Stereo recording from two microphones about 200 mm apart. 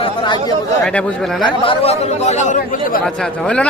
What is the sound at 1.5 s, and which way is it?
Speech, 30° left (ahead or behind).